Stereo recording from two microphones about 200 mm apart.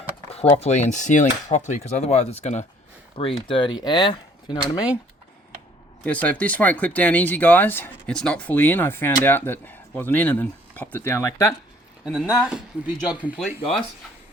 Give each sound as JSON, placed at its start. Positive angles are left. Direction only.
{"t": 0.3, "sound": "speech", "side_deg": 30}
{"t": 6.0, "sound": "speech", "side_deg": 5}
{"t": 12.0, "sound": "speech", "side_deg": -5}